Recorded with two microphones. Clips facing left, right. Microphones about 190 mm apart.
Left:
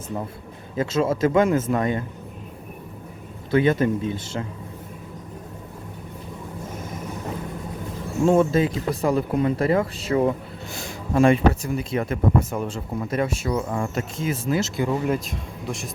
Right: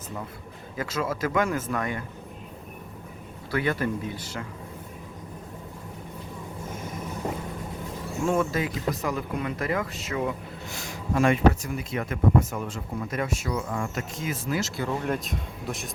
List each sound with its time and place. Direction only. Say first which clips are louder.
0.8 s speech: left 8 dB; 25° left (ahead or behind)
3.5 s speech: left 7 dB; 20° left (ahead or behind)
8.2 s speech: left 7 dB; 25° left (ahead or behind)
15.0 s speech: left 4 dB; centre (ahead or behind)